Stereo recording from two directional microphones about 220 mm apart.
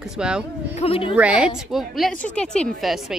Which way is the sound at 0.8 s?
25° left (ahead or behind).